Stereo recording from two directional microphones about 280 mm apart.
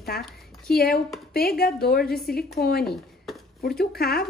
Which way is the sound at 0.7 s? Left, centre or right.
Left.